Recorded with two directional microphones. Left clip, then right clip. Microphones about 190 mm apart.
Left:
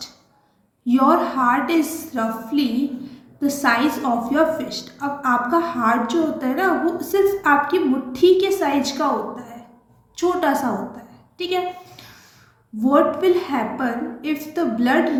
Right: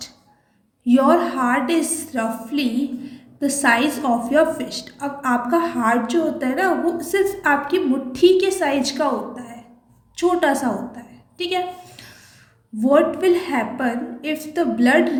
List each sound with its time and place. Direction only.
0.9 s a woman's voice: 45° right (ahead or behind)